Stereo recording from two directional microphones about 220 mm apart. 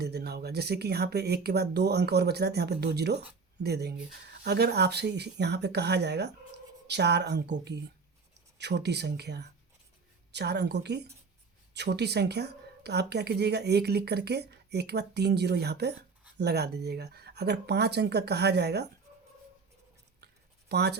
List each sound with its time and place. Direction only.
0.0 s a woman's voice: 45° right (ahead or behind)
20.2 s writing: 50° right (ahead or behind)